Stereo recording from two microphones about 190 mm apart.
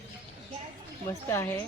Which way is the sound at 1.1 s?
15° left (ahead or behind).